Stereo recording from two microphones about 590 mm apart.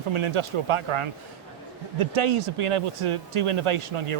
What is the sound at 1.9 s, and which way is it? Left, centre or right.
Speech, right.